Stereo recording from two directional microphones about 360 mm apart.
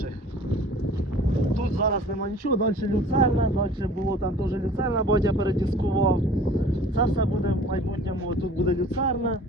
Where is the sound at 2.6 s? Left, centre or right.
Right.